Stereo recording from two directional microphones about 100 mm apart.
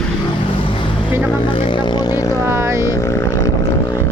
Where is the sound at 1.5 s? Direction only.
65° left (ahead or behind); by 2.2 s 45° left (ahead or behind).